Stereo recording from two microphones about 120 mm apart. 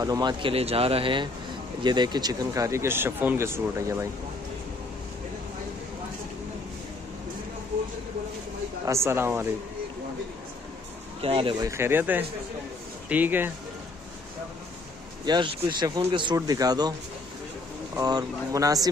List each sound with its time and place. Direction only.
0.0 s speech: 35° right (ahead or behind)
8.8 s speech: 25° right (ahead or behind)
11.1 s speech: 50° right (ahead or behind)
11.6 s speech: 20° right (ahead or behind)
15.2 s speech: 40° right (ahead or behind)
16.3 s speech: 30° right (ahead or behind)
18.0 s speech: 30° right (ahead or behind)